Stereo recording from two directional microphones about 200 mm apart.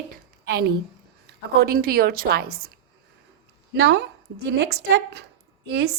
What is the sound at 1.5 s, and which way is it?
A woman's voice, 45° right (ahead or behind).